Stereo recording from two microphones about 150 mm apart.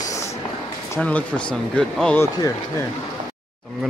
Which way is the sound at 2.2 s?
20° left (ahead or behind).